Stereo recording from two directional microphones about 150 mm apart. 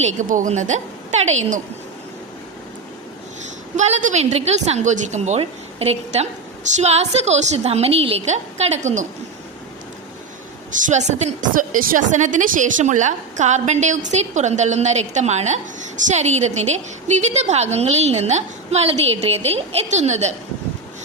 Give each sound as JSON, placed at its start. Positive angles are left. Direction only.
{"t": 0.0, "sound": "a woman's voice", "side_deg": -60}
{"t": 3.8, "sound": "a woman's voice", "side_deg": -50}
{"t": 10.7, "sound": "a woman's voice", "side_deg": -60}
{"t": 11.5, "sound": "a woman's voice", "side_deg": -70}